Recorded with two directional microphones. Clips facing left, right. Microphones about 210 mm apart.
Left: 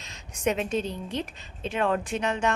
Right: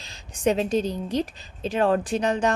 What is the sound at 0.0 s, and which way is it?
A woman's voice, 35° right (ahead or behind).